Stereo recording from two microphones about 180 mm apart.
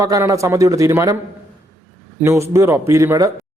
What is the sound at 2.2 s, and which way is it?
A man's voice, 15° right (ahead or behind).